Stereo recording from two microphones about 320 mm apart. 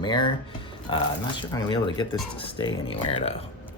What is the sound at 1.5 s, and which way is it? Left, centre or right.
Speech, centre.